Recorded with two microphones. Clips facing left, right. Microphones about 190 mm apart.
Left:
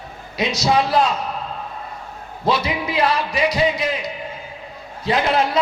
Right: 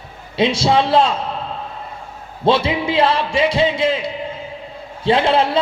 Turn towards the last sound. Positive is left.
turn(degrees=-30)  # may be behind; listen again after turning